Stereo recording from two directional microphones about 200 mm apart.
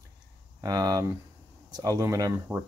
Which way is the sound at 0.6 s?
20° right (ahead or behind).